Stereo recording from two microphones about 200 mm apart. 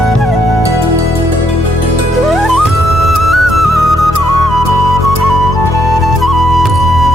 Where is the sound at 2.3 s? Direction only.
Centre (ahead or behind).